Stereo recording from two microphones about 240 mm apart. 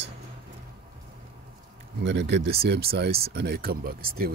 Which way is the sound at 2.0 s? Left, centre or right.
Right.